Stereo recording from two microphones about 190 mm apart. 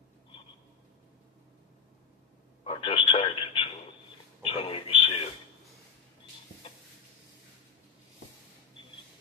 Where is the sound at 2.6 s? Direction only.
30° left (ahead or behind).